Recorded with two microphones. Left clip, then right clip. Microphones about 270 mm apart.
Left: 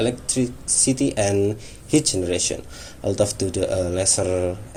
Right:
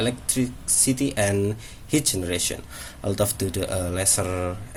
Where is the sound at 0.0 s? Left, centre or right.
Right.